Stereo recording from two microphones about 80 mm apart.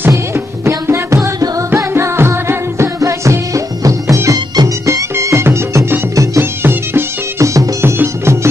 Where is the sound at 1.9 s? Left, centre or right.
Right.